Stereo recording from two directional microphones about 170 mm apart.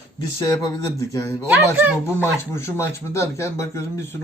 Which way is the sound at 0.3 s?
20° left (ahead or behind).